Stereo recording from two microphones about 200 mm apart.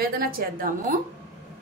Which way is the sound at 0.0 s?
45° right (ahead or behind).